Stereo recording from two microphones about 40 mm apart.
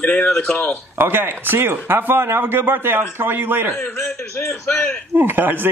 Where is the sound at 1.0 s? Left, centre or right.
Right.